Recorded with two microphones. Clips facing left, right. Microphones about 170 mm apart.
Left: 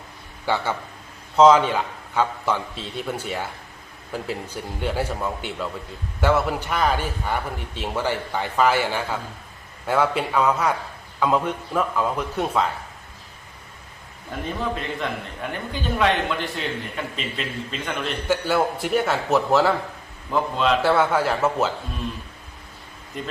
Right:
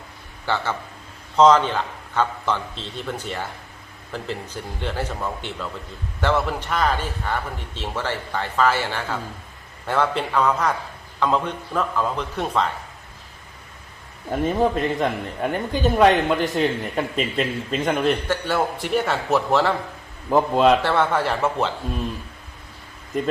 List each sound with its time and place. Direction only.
0.4 s a man's voice: 10° left (ahead or behind)
14.3 s a man's voice: 40° right (ahead or behind)
18.3 s a man's voice: 5° left (ahead or behind)
20.3 s a man's voice: 45° right (ahead or behind)
20.8 s a man's voice: 5° left (ahead or behind)
23.1 s a man's voice: 45° right (ahead or behind)